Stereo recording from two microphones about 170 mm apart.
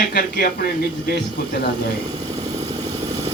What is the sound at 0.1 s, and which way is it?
Speech, 65° left (ahead or behind).